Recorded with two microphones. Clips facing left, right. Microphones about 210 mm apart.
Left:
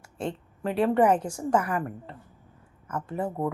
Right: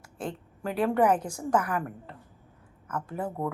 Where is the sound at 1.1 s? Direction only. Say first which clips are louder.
Left 2 dB; 25° left (ahead or behind).